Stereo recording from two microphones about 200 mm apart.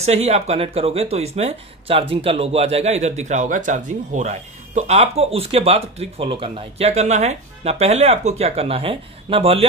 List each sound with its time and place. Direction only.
0.0 s speech: 30° right (ahead or behind)